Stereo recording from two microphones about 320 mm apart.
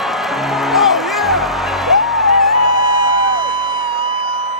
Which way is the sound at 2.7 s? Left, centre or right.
Left.